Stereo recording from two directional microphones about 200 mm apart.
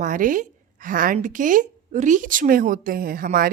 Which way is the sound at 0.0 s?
40° right (ahead or behind).